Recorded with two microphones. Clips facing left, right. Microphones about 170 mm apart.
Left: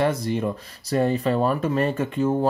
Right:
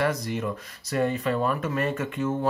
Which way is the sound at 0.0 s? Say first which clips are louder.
Left 4 dB; 30° left (ahead or behind).